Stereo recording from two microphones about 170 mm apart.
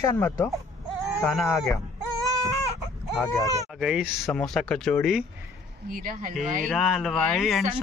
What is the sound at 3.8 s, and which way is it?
Speech, 5° right (ahead or behind).